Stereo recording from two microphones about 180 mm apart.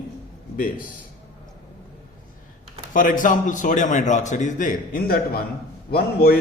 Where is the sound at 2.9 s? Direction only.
50° left (ahead or behind).